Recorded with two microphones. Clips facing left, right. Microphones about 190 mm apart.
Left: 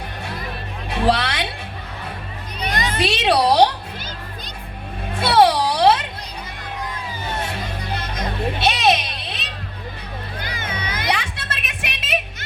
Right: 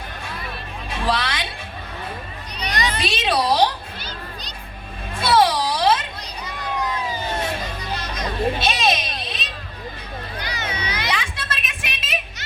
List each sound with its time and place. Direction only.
0.9 s a sound: 65° left (ahead or behind)
2.6 s children playing: 50° left (ahead or behind); by 3.8 s 65° left (ahead or behind)
5.1 s music: 65° left (ahead or behind)
7.9 s music: 55° left (ahead or behind)
10.3 s children playing: 50° left (ahead or behind)